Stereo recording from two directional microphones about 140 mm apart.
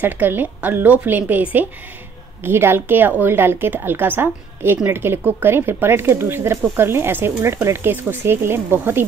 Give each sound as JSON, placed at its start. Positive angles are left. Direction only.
{"t": 0.0, "sound": "a woman's voice", "side_deg": -15}